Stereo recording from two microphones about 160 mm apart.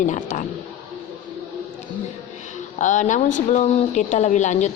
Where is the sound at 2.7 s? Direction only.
50° left (ahead or behind).